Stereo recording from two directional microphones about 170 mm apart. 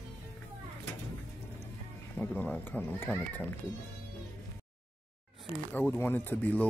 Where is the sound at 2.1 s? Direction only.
10° left (ahead or behind).